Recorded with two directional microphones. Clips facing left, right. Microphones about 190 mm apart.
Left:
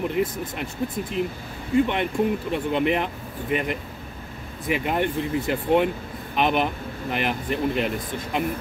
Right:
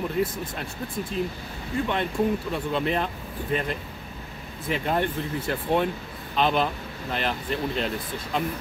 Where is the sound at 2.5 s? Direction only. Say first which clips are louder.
Left 3 dB; 15° left (ahead or behind).